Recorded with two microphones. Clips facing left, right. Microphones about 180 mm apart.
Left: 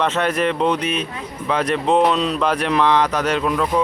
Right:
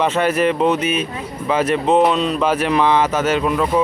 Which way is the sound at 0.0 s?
5° right (ahead or behind).